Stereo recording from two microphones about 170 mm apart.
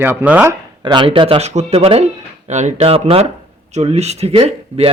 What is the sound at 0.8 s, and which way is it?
Speech, 25° right (ahead or behind).